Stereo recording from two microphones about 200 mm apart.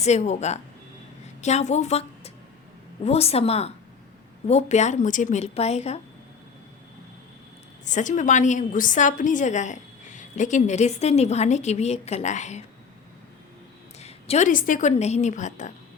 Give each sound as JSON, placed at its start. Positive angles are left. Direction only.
{"t": 0.0, "sound": "a woman's voice", "side_deg": 35}
{"t": 7.9, "sound": "a woman's voice", "side_deg": 40}
{"t": 14.0, "sound": "a woman's voice", "side_deg": 35}